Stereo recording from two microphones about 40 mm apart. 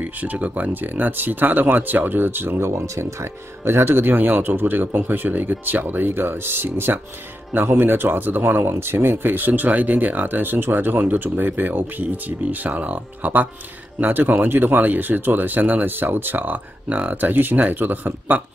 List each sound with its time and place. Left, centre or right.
0.0 s speech: right
3.6 s a man's voice: right
6.0 s speech: right
7.5 s a man's voice: right
9.5 s speech: right
11.0 s a man's voice: right
12.3 s speech: right